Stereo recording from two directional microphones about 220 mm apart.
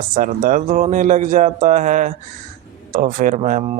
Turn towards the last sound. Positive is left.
turn(degrees=-30)  # may be behind; listen again after turning